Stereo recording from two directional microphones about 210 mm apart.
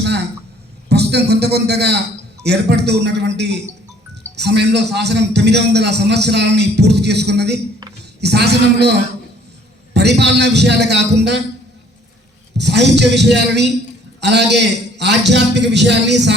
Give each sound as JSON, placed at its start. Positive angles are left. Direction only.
{"t": 0.0, "sound": "a sound", "side_deg": -55}
{"t": 0.9, "sound": "a man's voice", "side_deg": -50}
{"t": 12.5, "sound": "a man's voice", "side_deg": -55}